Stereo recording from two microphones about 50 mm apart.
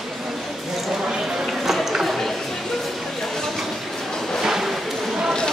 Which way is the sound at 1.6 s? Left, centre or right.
Centre.